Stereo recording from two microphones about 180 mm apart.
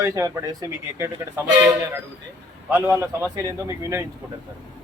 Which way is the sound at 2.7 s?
10° right (ahead or behind).